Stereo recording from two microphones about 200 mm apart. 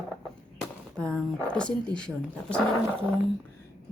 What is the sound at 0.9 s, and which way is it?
Speech, 5° left (ahead or behind).